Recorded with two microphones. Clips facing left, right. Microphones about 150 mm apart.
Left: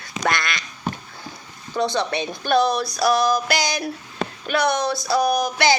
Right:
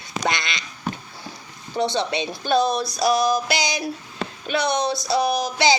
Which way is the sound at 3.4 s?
50° left (ahead or behind).